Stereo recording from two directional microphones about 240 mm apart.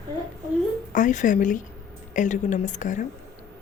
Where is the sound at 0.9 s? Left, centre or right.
Left.